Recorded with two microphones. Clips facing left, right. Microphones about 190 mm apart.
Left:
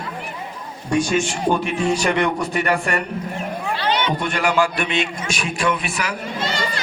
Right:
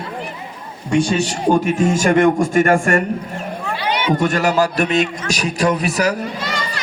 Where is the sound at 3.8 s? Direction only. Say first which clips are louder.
Right 3 dB; 10° right (ahead or behind).